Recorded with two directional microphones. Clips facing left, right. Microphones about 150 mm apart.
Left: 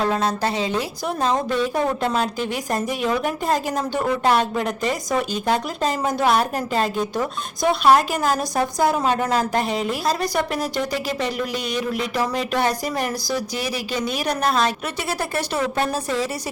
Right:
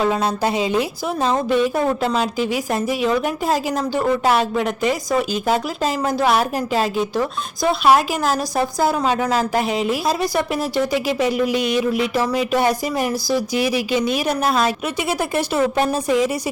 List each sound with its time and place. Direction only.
0.0 s a woman's voice: 10° right (ahead or behind)